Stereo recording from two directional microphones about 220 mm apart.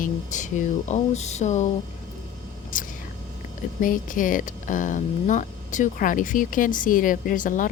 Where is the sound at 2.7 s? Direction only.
35° left (ahead or behind).